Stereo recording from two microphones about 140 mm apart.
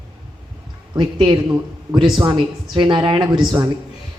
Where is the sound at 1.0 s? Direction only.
35° right (ahead or behind).